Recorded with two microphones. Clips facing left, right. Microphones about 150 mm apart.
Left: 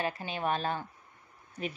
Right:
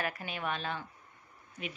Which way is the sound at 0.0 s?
30° left (ahead or behind).